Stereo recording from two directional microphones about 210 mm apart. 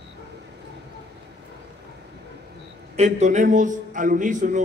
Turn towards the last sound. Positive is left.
turn(degrees=-40)  # may be behind; listen again after turning